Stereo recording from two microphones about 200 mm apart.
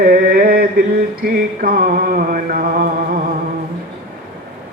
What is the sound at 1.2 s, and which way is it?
Mantra, 45° right (ahead or behind).